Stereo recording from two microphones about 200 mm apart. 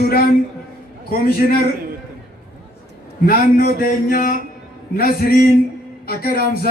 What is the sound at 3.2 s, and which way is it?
A man's voice, 45° left (ahead or behind).